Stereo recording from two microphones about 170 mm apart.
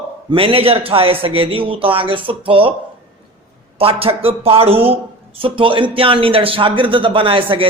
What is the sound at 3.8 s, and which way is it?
Speech, 35° right (ahead or behind).